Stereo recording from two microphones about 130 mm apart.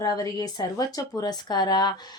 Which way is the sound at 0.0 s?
30° left (ahead or behind).